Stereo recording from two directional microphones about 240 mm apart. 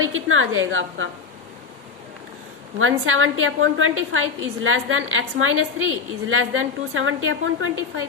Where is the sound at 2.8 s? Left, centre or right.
Right.